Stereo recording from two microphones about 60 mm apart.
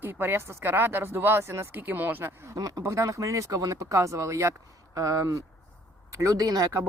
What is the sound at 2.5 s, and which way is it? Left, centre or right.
Speech, right.